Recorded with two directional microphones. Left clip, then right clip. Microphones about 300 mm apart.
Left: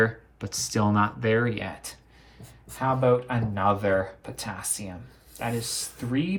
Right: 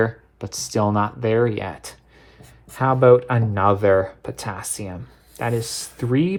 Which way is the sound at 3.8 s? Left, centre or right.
Right.